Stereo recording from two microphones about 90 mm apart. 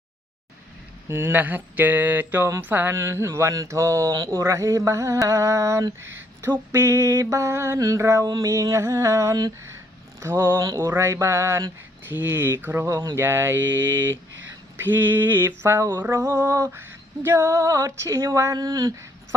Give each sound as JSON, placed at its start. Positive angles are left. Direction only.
{"t": 1.0, "sound": "mantra", "side_deg": -25}
{"t": 10.2, "sound": "speech", "side_deg": -30}
{"t": 10.6, "sound": "mantra", "side_deg": -40}
{"t": 12.8, "sound": "speech", "side_deg": -40}
{"t": 13.1, "sound": "mantra", "side_deg": -25}
{"t": 18.3, "sound": "speech", "side_deg": -40}